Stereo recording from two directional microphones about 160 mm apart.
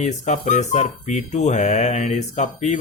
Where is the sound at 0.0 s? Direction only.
45° left (ahead or behind).